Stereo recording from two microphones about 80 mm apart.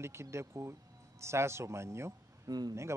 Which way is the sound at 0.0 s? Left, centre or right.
Right.